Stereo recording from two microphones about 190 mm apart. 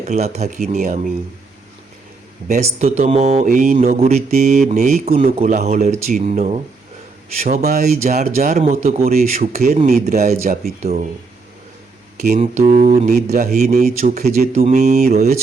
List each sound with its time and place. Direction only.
0.0 s speech: 35° right (ahead or behind)
2.5 s speech: 35° right (ahead or behind)
5.0 s speech: 35° right (ahead or behind)
9.3 s speech: 45° right (ahead or behind)
12.1 s speech: 40° right (ahead or behind)